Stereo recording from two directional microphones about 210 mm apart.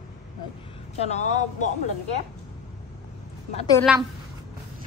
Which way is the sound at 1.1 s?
35° left (ahead or behind).